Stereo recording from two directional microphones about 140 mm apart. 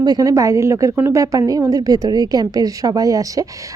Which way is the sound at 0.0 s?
25° right (ahead or behind).